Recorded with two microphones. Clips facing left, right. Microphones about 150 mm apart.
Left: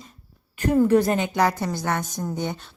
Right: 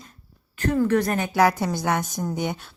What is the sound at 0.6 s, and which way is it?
Speech, 15° left (ahead or behind).